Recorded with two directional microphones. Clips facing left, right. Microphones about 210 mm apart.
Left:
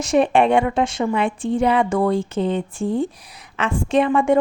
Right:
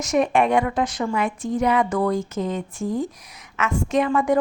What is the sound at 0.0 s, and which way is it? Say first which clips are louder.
A woman's voice: left 3 dB; 30° left (ahead or behind).